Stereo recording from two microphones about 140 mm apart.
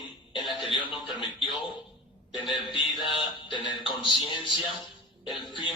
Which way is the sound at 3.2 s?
35° left (ahead or behind).